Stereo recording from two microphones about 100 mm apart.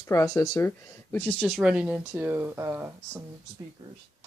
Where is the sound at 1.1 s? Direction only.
20° left (ahead or behind).